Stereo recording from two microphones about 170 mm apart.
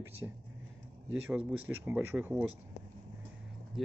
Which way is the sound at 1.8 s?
10° right (ahead or behind).